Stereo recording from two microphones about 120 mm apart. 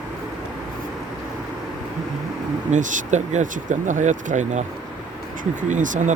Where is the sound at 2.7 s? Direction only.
90° right.